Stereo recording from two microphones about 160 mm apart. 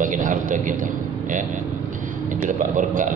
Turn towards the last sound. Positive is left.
turn(degrees=-55)  # may be behind; listen again after turning